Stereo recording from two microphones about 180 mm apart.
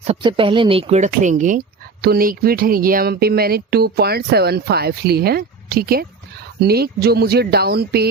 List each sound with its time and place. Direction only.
0.0 s speech: 30° right (ahead or behind); by 8.0 s 60° right (ahead or behind)